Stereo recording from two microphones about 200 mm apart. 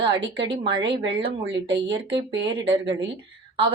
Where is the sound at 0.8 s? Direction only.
60° right (ahead or behind).